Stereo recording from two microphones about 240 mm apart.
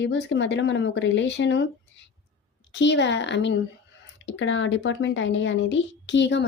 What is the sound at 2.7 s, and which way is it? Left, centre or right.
A woman's voice, left.